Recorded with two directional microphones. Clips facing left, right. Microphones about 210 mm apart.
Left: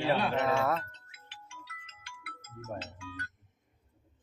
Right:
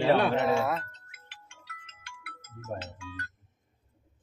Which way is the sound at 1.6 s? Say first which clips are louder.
Right 2 dB; 55° right (ahead or behind).